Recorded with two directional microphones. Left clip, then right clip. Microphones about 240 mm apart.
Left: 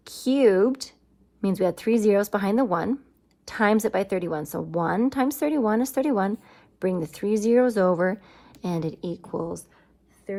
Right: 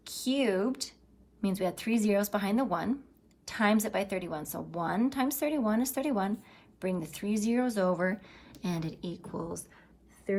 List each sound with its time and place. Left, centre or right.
0.5 s speech: left
10.3 s a woman's voice: centre